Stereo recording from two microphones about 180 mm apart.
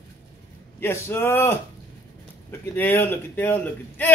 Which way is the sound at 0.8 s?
15° left (ahead or behind).